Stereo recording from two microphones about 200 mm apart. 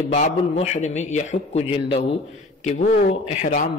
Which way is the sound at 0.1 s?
35° left (ahead or behind).